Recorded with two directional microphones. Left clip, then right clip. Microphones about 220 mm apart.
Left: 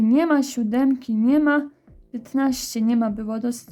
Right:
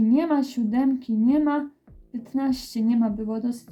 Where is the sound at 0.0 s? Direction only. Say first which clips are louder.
Left 3 dB; 35° left (ahead or behind).